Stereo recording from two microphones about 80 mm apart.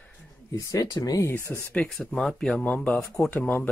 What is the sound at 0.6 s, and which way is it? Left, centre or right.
Speech, left.